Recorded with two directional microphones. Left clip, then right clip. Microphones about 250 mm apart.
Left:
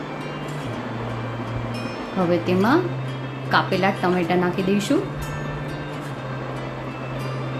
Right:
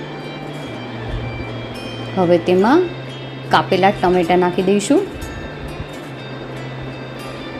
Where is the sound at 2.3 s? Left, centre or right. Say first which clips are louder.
Right 7 dB; centre.